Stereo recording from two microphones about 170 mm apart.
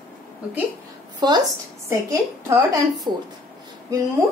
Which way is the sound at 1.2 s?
25° right (ahead or behind).